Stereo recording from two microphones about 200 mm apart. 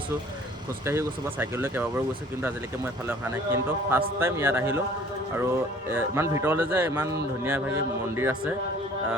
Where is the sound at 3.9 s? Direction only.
10° right (ahead or behind).